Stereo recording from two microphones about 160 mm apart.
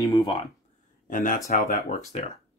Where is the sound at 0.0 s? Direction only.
20° left (ahead or behind).